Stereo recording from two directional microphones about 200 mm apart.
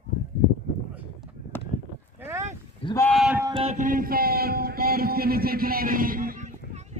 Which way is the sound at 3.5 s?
35° right (ahead or behind).